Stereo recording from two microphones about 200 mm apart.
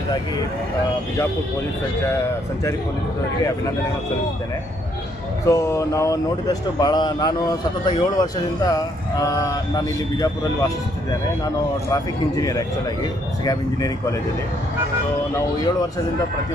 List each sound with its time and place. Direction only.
5.5 s speech: 15° left (ahead or behind)
12.4 s speech: 15° left (ahead or behind)